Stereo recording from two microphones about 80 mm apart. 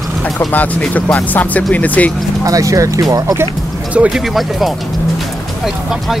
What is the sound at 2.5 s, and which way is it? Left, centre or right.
Speech, right.